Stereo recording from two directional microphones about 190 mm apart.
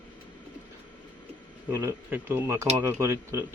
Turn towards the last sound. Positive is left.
turn(degrees=-15)  # may be behind; listen again after turning